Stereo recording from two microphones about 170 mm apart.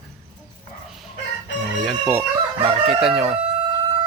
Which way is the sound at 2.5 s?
30° right (ahead or behind).